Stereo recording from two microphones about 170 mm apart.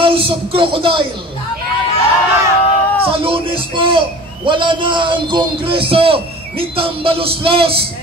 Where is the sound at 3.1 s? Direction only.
30° right (ahead or behind).